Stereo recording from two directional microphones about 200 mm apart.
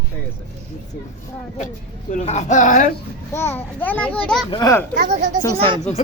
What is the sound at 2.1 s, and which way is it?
Speech, 35° left (ahead or behind).